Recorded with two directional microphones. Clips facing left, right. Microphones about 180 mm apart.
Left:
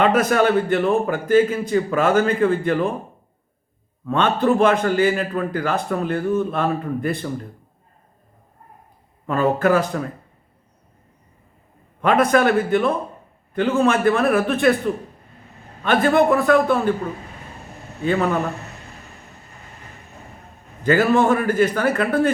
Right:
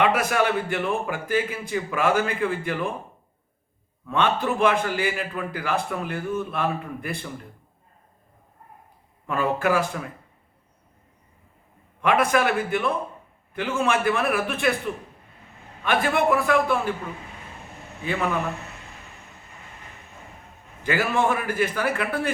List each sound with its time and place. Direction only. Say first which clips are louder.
0.0 s a man's voice: left 5 dB; 40° left (ahead or behind)
4.0 s a man's voice: left 5 dB; 40° left (ahead or behind)
9.2 s a man's voice: left 5 dB; 35° left (ahead or behind)
11.9 s a man's voice: left 5 dB; 40° left (ahead or behind)
20.8 s a man's voice: left 7 dB; 40° left (ahead or behind)